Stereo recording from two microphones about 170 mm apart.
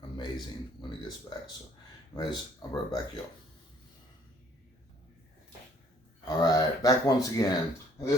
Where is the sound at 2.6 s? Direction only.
25° left (ahead or behind).